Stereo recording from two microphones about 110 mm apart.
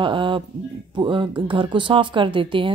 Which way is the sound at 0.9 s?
45° right (ahead or behind).